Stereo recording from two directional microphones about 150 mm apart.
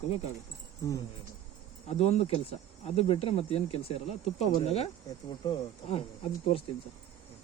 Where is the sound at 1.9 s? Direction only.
45° left (ahead or behind).